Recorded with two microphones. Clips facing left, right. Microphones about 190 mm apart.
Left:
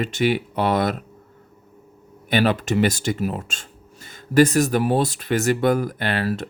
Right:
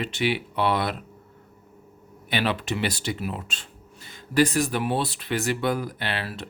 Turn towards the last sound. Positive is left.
turn(degrees=45)  # may be behind; listen again after turning